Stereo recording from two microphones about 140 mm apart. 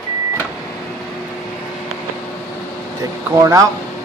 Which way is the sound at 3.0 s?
20° right (ahead or behind).